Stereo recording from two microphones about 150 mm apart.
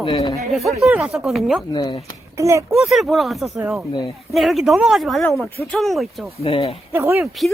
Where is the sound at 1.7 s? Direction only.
25° left (ahead or behind).